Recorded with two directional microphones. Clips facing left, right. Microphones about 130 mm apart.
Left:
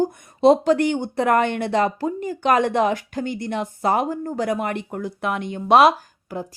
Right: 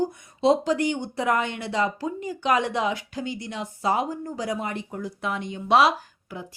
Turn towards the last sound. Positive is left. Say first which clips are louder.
# left 7 dB
turn(degrees=45)  # may be behind; listen again after turning